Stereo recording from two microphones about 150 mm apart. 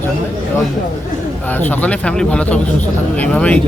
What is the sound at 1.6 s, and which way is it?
Speech, 10° left (ahead or behind).